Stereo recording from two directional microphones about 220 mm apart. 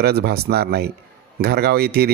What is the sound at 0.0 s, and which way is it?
A man's voice, 45° right (ahead or behind).